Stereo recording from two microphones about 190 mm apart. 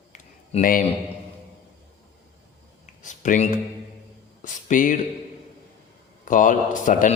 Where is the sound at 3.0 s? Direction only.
40° left (ahead or behind).